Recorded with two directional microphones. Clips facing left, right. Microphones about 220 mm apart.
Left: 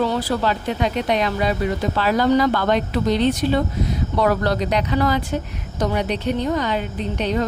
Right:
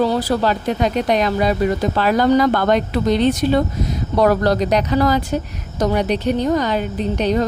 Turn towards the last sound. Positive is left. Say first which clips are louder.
# right 4 dB
turn(degrees=-40)  # may be behind; listen again after turning